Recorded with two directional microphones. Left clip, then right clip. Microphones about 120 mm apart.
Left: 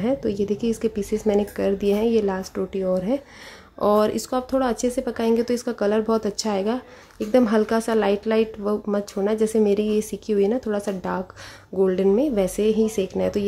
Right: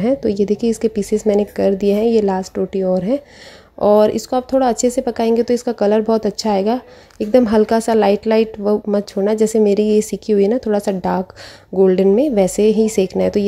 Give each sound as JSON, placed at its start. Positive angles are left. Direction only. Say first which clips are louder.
{"t": 0.0, "sound": "speech", "louder": "right 7 dB", "side_deg": -35}